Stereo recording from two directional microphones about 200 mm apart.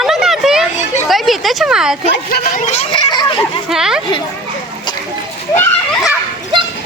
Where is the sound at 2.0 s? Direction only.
35° left (ahead or behind).